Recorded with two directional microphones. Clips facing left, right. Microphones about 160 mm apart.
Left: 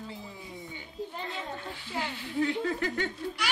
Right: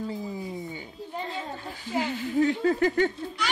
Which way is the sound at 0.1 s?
40° right (ahead or behind).